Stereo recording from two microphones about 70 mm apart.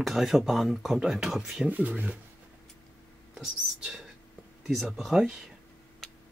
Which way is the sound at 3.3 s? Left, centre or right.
Centre.